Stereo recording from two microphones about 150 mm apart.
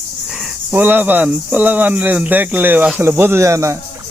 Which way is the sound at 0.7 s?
10° right (ahead or behind).